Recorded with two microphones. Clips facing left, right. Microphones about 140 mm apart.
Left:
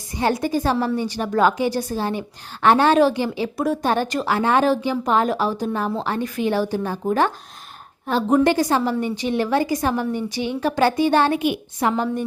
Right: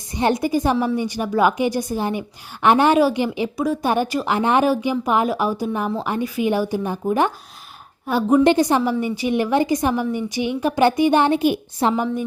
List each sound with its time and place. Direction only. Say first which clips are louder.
0.2 s a woman's voice: right 2 dB; 20° right (ahead or behind); by 8.4 s 5° right (ahead or behind)
8.4 s a woman's voice: right 3 dB; 20° right (ahead or behind)
8.8 s a woman's voice: right 1 dB; 10° right (ahead or behind)
11.3 s a woman's voice: right 3 dB; 40° right (ahead or behind)